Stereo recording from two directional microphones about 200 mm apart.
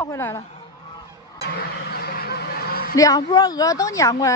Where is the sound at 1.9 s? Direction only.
50° left (ahead or behind).